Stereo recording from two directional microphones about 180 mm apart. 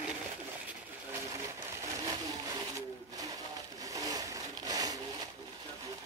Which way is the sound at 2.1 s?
20° right (ahead or behind).